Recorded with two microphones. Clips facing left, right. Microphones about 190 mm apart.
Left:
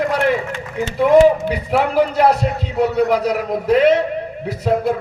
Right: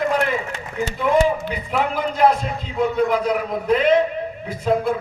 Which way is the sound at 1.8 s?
70° left (ahead or behind).